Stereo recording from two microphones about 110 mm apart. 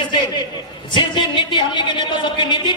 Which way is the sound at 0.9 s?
45° left (ahead or behind).